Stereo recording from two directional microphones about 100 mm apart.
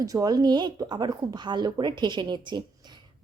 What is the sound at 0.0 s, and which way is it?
A woman's voice, 35° right (ahead or behind).